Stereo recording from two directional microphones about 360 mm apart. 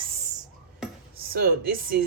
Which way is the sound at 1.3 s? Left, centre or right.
Right.